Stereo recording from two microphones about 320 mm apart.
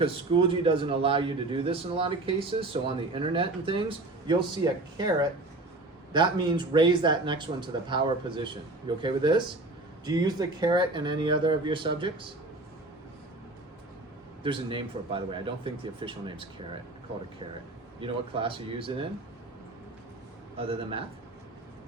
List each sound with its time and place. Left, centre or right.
0.0 s a man's voice: centre
14.4 s a man's voice: centre
18.0 s a man's voice: centre
20.6 s a man's voice: centre